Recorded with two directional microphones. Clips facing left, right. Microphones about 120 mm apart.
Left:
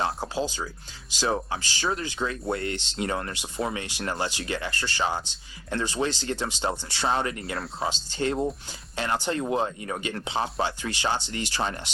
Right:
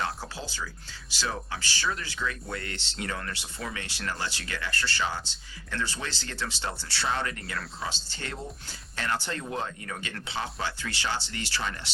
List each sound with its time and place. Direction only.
0.0 s music: 15° left (ahead or behind)
1.3 s speech: 25° left (ahead or behind)
3.8 s speech: 15° left (ahead or behind)